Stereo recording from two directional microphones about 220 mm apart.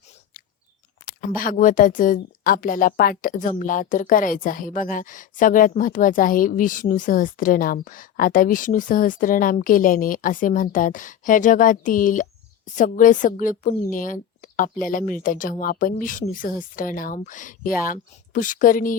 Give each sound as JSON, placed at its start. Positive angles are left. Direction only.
{"t": 1.2, "sound": "a woman's voice", "side_deg": 40}